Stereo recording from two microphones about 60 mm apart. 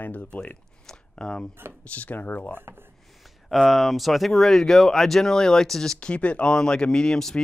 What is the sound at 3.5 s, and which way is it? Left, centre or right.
Speech, centre.